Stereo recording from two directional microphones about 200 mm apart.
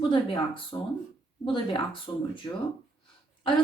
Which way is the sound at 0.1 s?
25° left (ahead or behind).